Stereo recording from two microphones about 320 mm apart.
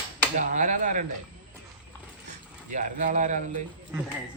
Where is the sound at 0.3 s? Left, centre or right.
Right.